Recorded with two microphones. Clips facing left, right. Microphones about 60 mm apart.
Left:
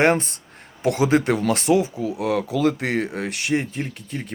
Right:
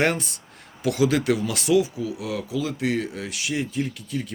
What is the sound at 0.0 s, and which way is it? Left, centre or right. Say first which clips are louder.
Speech: left 5 dB; left.